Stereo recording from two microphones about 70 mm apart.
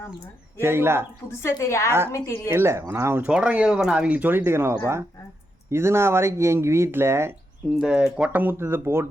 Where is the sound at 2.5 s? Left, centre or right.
Right.